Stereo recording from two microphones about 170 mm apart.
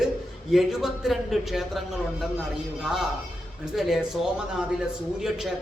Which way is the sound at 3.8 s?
Centre (ahead or behind).